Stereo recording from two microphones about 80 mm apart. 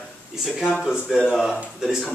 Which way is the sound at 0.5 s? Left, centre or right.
Centre.